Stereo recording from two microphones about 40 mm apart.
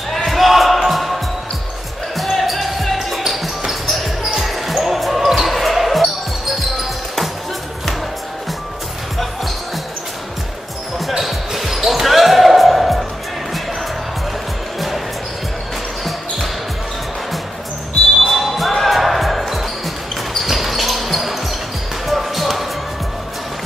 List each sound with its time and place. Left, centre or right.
0.3 s music: centre
2.1 s basketball bounce: centre
11.0 s basketball bounce: centre
18.2 s basketball bounce: centre